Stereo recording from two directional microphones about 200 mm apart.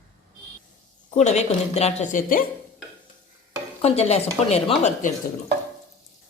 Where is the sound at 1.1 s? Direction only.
35° left (ahead or behind).